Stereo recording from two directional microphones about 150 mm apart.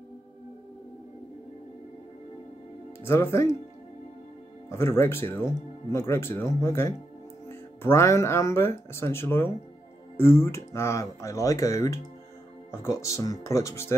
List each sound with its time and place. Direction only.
3.1 s speech: 15° left (ahead or behind)
4.6 s speech: 15° left (ahead or behind)